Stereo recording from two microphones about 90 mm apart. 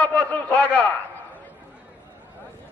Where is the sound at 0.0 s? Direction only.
15° left (ahead or behind).